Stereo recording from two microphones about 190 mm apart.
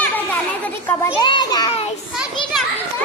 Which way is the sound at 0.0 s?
10° left (ahead or behind).